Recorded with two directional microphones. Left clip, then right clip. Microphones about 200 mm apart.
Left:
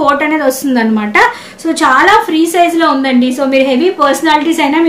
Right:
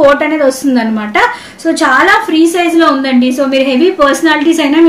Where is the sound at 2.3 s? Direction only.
40° left (ahead or behind).